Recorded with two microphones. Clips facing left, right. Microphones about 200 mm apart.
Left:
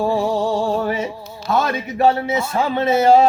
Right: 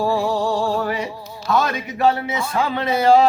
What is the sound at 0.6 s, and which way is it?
Music, 25° left (ahead or behind).